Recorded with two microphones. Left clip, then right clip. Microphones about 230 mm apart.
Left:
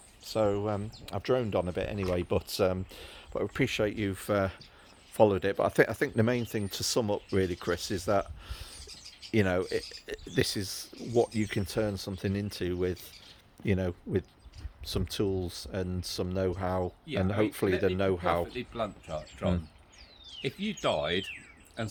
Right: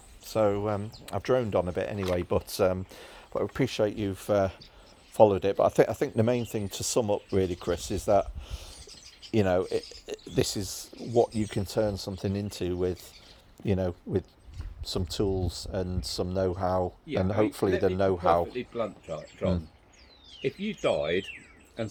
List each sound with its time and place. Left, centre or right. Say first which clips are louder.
0.3 s speech: right 3 dB; centre
18.5 s speech: right 2 dB; left
20.4 s speech: right 3 dB; left